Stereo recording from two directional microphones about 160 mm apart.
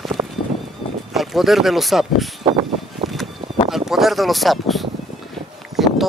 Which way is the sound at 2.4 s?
35° right (ahead or behind).